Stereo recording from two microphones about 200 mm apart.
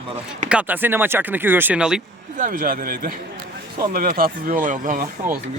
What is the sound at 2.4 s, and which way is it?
Speech, 45° right (ahead or behind).